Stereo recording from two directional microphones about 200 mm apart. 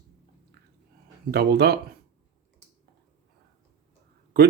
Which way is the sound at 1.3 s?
55° right (ahead or behind).